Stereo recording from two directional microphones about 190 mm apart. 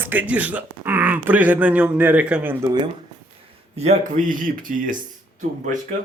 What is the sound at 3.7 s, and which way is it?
Speech, 35° right (ahead or behind).